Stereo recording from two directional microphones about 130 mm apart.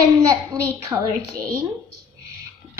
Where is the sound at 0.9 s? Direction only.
25° right (ahead or behind).